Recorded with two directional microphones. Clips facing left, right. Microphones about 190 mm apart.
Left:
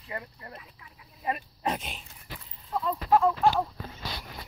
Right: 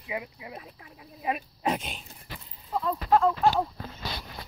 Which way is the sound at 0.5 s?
45° right (ahead or behind).